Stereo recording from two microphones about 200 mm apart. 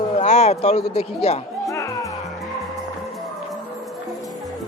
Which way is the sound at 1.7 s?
15° left (ahead or behind).